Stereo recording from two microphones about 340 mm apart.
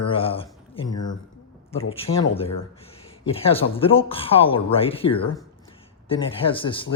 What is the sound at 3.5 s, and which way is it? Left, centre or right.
Speech, centre.